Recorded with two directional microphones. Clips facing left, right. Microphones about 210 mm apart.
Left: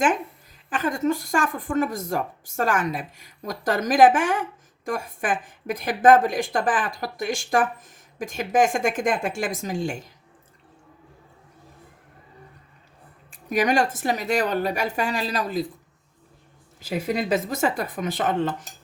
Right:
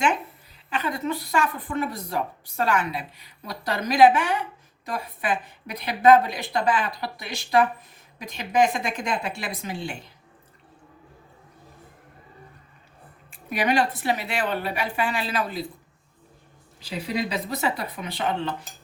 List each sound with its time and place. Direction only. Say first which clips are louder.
0.7 s a woman's voice: left 4 dB; 45° left (ahead or behind)
13.3 s a woman's voice: left 2 dB; 45° left (ahead or behind)
16.8 s a woman's voice: left 3 dB; 50° left (ahead or behind)